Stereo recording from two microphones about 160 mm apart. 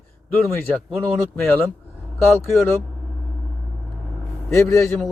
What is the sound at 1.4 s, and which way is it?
Speech, 10° left (ahead or behind).